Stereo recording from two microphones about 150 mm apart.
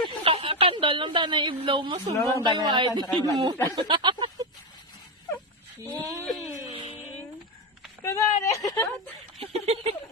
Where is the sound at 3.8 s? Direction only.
30° right (ahead or behind).